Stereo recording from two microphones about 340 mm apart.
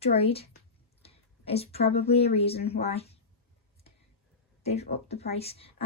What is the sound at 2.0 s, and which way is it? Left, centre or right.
Speech, centre.